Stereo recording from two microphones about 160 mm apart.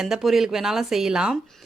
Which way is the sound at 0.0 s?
Centre (ahead or behind).